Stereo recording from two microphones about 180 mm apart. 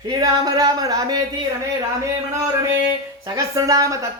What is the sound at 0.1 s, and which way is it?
Speech, 20° right (ahead or behind).